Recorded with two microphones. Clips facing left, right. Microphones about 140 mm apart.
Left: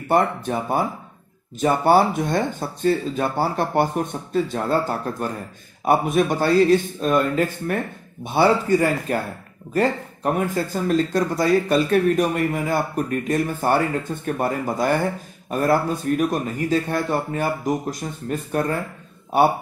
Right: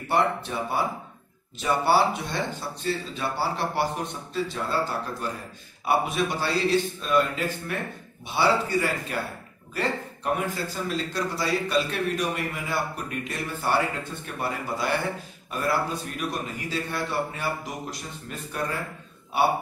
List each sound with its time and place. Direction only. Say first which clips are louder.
0.1 s speech: left 5 dB; 50° left (ahead or behind)